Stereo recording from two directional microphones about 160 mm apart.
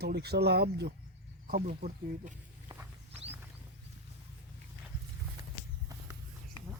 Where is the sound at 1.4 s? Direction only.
65° right (ahead or behind).